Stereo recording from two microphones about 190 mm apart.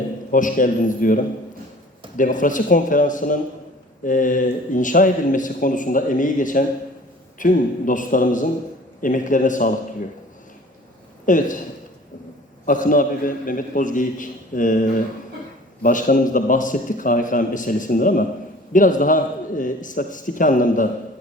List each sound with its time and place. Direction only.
0.3 s a man's voice: 45° left (ahead or behind)
11.3 s a man's voice: 45° left (ahead or behind)
12.6 s a man's voice: 45° left (ahead or behind)